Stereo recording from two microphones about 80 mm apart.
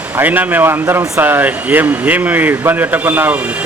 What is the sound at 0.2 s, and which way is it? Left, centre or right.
Speech, right.